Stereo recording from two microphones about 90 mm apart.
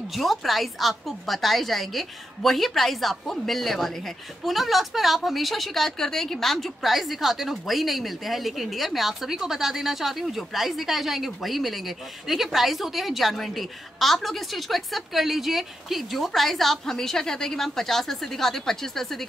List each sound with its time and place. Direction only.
0.1 s speech: centre (ahead or behind)